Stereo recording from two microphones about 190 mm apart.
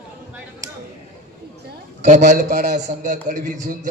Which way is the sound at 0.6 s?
15° right (ahead or behind).